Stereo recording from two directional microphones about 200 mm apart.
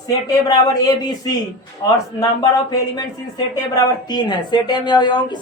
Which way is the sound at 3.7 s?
20° left (ahead or behind).